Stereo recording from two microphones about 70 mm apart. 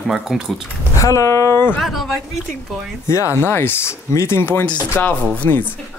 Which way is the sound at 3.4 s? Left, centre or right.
Left.